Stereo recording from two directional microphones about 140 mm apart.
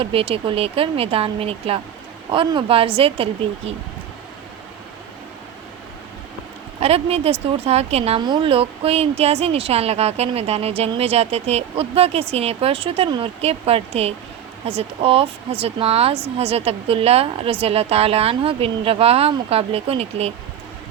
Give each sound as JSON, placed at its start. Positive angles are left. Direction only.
{"t": 0.0, "sound": "a woman's voice", "side_deg": -40}
{"t": 6.7, "sound": "speech", "side_deg": -45}
{"t": 8.2, "sound": "speech", "side_deg": -35}